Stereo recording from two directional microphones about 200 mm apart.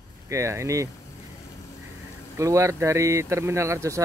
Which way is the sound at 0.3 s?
15° right (ahead or behind).